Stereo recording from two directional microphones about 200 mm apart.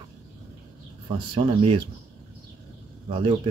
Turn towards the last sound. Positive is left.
turn(degrees=-25)  # may be behind; listen again after turning